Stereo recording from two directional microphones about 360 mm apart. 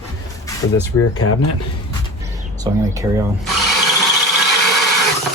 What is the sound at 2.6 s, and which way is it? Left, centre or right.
Speech, centre.